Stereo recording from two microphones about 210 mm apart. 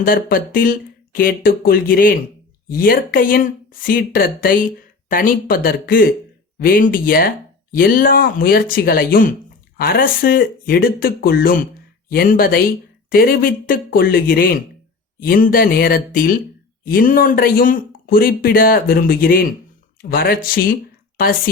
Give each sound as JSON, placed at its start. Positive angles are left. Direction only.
{"t": 0.0, "sound": "speech", "side_deg": 45}